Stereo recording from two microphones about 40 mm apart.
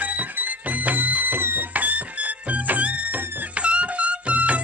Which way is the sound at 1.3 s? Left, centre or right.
Right.